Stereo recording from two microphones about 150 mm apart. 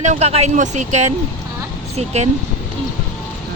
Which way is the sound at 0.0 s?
50° right (ahead or behind).